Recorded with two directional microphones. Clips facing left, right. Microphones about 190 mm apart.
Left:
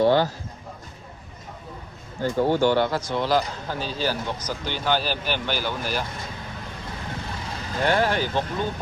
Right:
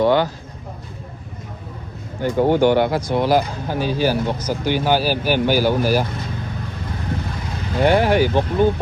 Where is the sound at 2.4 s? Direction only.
55° right (ahead or behind).